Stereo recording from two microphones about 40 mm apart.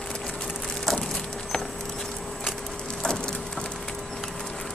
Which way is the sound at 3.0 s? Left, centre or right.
Centre.